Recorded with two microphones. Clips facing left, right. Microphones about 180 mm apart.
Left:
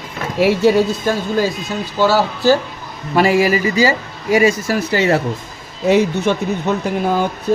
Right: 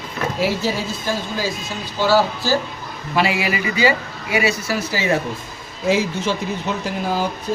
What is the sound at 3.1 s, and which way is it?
Speech, 45° left (ahead or behind).